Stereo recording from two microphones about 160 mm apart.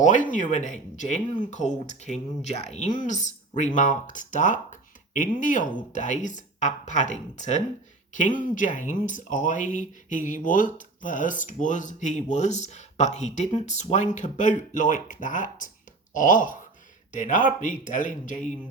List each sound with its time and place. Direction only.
0.0 s speech: 50° left (ahead or behind)